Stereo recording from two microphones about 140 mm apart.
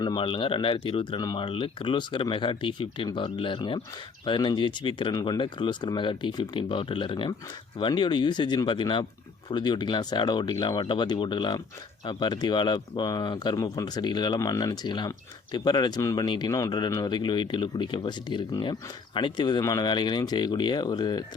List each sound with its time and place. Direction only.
0.0 s speech: 35° left (ahead or behind)